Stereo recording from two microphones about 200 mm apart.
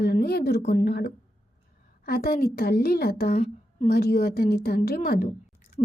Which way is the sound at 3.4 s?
35° left (ahead or behind).